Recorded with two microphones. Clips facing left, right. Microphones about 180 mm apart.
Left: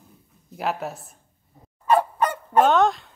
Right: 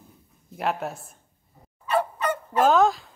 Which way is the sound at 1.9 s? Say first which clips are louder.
Left 4 dB; 45° left (ahead or behind).